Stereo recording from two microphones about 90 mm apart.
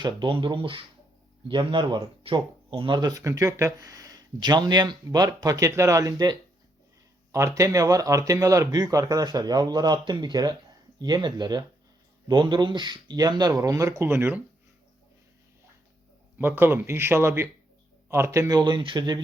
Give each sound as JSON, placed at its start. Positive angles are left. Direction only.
{"t": 0.0, "sound": "speech", "side_deg": -65}
{"t": 1.5, "sound": "speech", "side_deg": -70}
{"t": 3.1, "sound": "speech", "side_deg": -40}
{"t": 7.3, "sound": "speech", "side_deg": -35}
{"t": 16.4, "sound": "speech", "side_deg": -25}
{"t": 18.4, "sound": "speech", "side_deg": -50}